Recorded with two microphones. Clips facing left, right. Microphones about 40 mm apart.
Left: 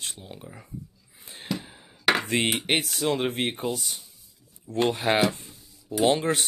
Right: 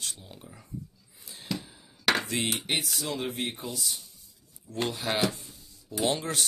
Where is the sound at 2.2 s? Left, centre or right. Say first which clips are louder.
Left 6 dB; left.